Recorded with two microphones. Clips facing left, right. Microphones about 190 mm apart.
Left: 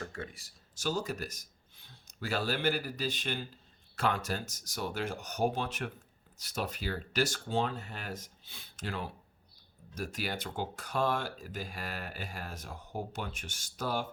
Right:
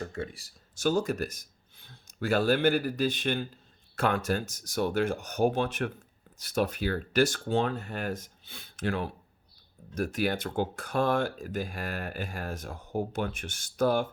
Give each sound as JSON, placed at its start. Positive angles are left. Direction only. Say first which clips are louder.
{"t": 0.1, "sound": "speech", "louder": "right 6 dB", "side_deg": -25}
{"t": 0.8, "sound": "speech", "louder": "right 7 dB", "side_deg": -55}